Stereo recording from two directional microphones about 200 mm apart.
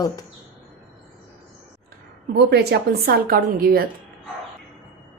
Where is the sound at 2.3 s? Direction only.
55° right (ahead or behind).